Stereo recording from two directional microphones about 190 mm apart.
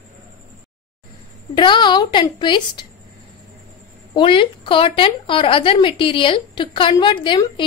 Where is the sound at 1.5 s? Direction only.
25° left (ahead or behind).